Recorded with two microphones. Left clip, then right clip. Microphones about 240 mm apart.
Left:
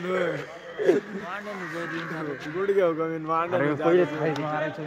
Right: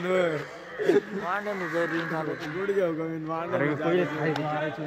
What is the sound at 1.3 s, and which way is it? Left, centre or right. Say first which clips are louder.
Speech: right 7 dB; centre.